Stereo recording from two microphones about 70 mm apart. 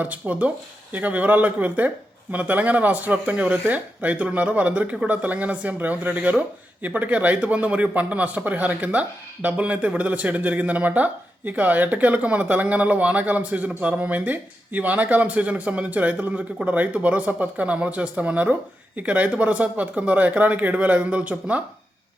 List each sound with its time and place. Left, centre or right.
0.0 s speech: right